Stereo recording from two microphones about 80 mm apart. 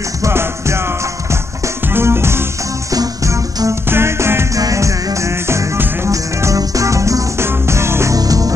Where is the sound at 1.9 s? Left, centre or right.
Right.